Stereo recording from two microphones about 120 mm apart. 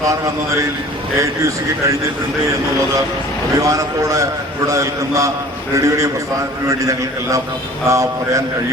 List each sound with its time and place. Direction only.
3.6 s a man's voice: 25° right (ahead or behind)